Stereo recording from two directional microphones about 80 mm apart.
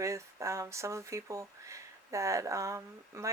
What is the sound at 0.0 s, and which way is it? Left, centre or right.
Speech, right.